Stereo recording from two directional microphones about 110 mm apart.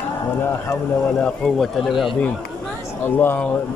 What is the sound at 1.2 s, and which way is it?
Speech, 5° left (ahead or behind).